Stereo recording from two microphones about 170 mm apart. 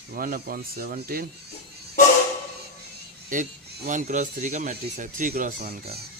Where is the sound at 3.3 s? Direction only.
50° right (ahead or behind).